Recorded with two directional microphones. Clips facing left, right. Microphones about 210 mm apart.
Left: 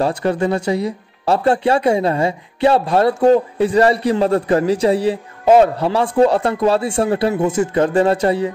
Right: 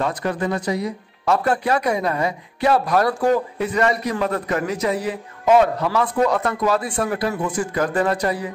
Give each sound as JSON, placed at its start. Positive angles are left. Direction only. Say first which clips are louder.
{"t": 0.0, "sound": "speech", "louder": "left 5 dB", "side_deg": 30}